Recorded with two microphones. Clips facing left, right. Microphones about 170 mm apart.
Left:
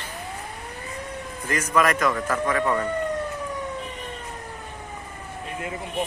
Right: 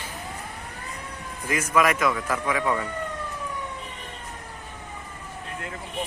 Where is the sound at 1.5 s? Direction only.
10° right (ahead or behind).